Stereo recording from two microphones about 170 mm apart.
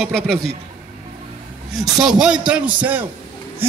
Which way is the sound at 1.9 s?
5° right (ahead or behind).